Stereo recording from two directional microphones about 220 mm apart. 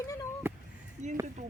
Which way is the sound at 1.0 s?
30° right (ahead or behind).